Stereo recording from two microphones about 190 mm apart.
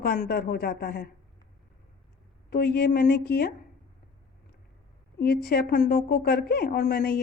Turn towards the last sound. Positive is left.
turn(degrees=55)  # may be behind; listen again after turning